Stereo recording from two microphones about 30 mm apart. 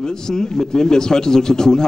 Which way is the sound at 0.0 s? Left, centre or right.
Left.